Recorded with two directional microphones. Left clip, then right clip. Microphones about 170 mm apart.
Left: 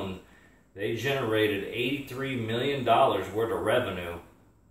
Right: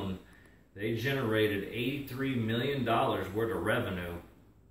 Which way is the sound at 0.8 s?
15° left (ahead or behind).